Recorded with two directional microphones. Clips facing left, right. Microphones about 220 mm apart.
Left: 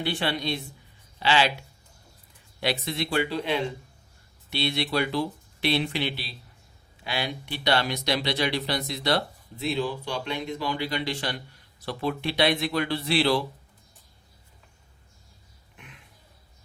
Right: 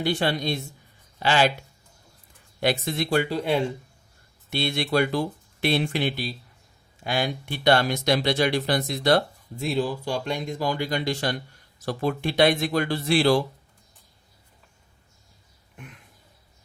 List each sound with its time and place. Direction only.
0.0 s speech: 45° right (ahead or behind)
2.6 s speech: 50° right (ahead or behind)